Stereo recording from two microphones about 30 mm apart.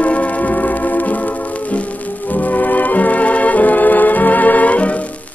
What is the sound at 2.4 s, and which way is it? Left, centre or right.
Music, left.